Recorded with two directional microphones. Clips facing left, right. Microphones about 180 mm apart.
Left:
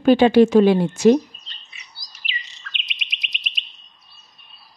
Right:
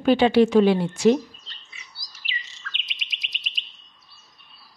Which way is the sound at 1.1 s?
20° left (ahead or behind).